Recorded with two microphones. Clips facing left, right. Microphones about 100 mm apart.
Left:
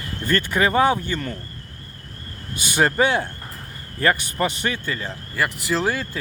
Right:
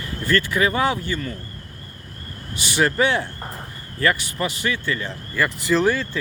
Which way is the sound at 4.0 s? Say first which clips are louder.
Left 1 dB; 40° left (ahead or behind).